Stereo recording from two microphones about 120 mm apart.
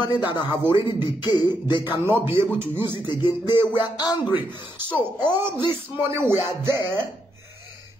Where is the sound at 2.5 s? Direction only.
15° right (ahead or behind).